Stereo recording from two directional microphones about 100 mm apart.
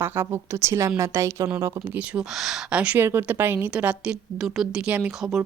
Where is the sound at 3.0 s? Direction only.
20° right (ahead or behind).